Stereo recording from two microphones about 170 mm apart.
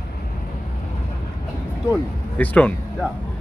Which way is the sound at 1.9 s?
10° left (ahead or behind).